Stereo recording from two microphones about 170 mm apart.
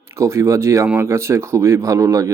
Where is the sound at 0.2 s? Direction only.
15° right (ahead or behind).